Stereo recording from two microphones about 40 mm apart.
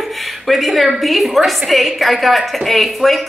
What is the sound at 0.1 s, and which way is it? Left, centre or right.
A woman's voice, centre.